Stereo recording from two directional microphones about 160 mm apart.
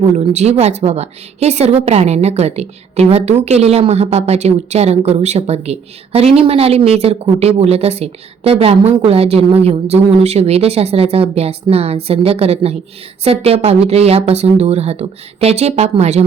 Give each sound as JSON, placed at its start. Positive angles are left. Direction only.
{"t": 0.1, "sound": "a woman's voice", "side_deg": -45}